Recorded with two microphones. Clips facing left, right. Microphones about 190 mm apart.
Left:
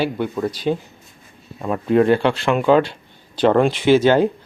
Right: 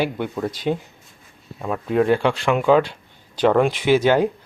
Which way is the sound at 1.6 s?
Centre (ahead or behind).